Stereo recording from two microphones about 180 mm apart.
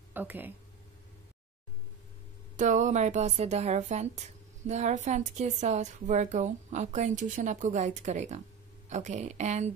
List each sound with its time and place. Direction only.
0.1 s speech: 10° right (ahead or behind)
2.5 s speech: 45° right (ahead or behind)